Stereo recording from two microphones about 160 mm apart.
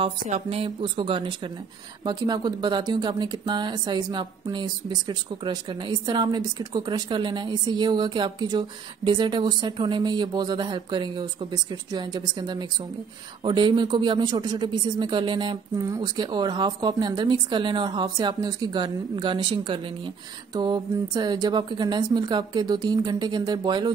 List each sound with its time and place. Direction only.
0.3 s speech: 35° right (ahead or behind)